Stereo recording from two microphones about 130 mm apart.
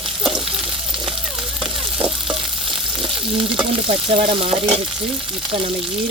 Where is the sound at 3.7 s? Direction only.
45° right (ahead or behind).